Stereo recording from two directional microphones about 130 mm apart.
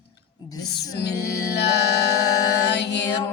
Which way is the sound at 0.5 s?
30° left (ahead or behind).